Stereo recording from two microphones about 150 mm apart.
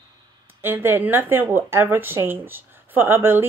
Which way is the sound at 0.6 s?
15° right (ahead or behind).